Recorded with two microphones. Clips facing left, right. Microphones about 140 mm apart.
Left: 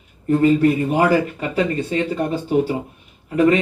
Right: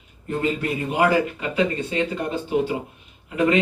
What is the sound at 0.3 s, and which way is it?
A man's voice, 40° left (ahead or behind).